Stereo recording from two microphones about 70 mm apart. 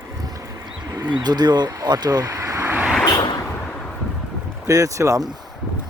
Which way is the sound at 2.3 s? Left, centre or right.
Right.